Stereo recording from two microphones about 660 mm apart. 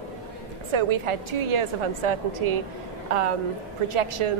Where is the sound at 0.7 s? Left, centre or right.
Right.